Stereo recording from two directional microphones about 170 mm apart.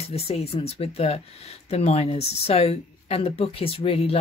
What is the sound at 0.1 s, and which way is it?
Speech, 35° left (ahead or behind).